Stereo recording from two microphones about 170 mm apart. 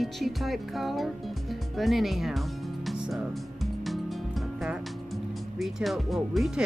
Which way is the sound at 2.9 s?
5° right (ahead or behind).